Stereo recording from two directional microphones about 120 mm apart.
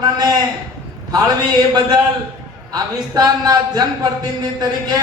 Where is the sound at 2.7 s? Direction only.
35° right (ahead or behind).